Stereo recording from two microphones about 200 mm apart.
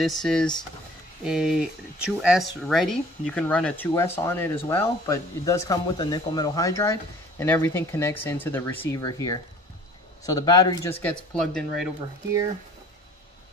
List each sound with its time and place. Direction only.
0.0 s speech: centre (ahead or behind)